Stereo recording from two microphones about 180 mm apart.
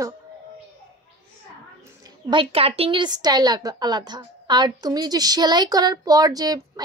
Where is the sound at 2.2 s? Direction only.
30° right (ahead or behind).